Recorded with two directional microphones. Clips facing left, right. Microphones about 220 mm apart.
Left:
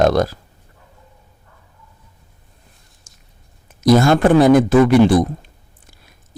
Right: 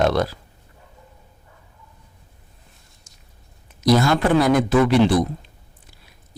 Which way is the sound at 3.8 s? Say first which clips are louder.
Left 5 dB; 50° left (ahead or behind).